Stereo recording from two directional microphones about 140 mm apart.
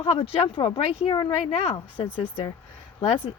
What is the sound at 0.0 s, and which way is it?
Speech, 40° left (ahead or behind).